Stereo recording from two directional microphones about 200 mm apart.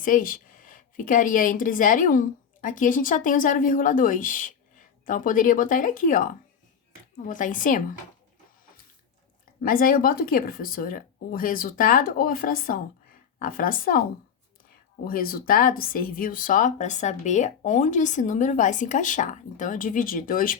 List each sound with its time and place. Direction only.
0.0 s a woman's voice: 45° left (ahead or behind)
9.6 s a woman's voice: 45° left (ahead or behind)